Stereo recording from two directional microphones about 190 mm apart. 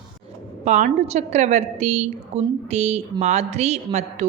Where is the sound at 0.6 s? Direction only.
35° right (ahead or behind).